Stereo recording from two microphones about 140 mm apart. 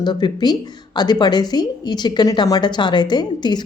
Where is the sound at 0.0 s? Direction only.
30° left (ahead or behind).